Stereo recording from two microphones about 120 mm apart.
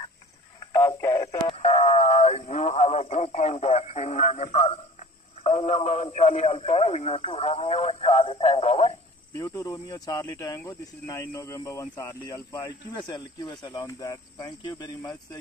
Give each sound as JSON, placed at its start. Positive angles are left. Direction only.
{"t": 0.7, "sound": "radio", "side_deg": 35}
{"t": 1.5, "sound": "a sound", "side_deg": 65}
{"t": 5.6, "sound": "speech", "side_deg": 55}
{"t": 6.1, "sound": "speech", "side_deg": 70}
{"t": 9.4, "sound": "speech", "side_deg": 30}